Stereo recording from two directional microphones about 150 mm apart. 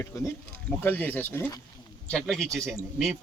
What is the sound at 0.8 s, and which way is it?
Speech, 10° left (ahead or behind).